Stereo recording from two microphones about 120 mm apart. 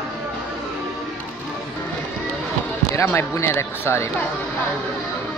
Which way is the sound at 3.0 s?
25° left (ahead or behind).